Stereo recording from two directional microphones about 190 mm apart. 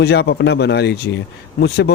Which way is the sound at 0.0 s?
60° left (ahead or behind).